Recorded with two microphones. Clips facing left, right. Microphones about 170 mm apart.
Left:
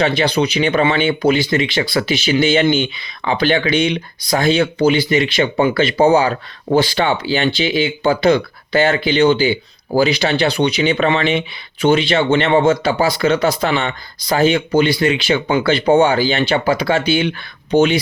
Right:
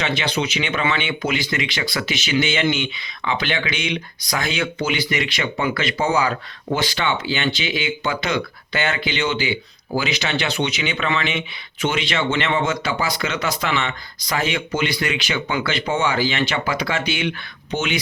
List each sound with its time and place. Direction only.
0.0 s speech: 35° left (ahead or behind)